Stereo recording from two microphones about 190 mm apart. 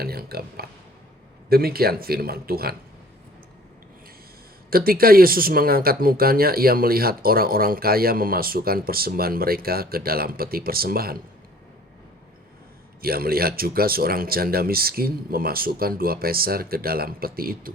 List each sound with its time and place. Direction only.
0.0 s speech: 55° right (ahead or behind)
4.7 s speech: 50° right (ahead or behind)
13.0 s speech: 50° right (ahead or behind)